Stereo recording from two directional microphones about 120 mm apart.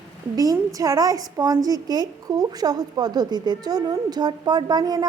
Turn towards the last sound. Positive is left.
turn(degrees=-35)  # may be behind; listen again after turning